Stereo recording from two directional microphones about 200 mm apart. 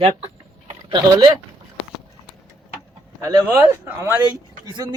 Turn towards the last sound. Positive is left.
turn(degrees=-10)  # may be behind; listen again after turning